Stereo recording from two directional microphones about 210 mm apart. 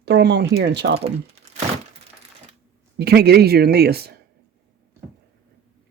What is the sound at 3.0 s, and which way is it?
Speech, 50° right (ahead or behind).